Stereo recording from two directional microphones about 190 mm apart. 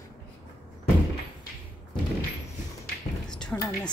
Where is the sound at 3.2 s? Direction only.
5° left (ahead or behind).